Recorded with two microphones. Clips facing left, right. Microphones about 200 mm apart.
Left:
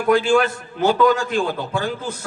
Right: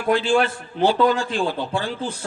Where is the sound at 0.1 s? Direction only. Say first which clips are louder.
Left 2 dB; 45° left (ahead or behind).